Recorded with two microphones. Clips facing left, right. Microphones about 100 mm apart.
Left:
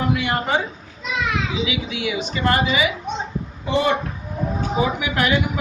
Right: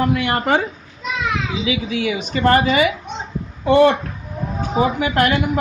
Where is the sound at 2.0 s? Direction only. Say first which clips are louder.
Right 4 dB; 40° right (ahead or behind); by 3.9 s 55° right (ahead or behind).